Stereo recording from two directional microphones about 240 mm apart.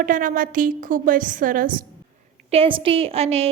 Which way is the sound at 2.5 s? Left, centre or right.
Right.